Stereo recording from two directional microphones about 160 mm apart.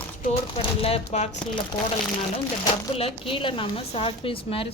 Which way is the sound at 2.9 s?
35° left (ahead or behind).